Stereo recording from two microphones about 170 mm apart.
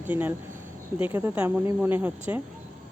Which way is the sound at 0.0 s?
10° right (ahead or behind).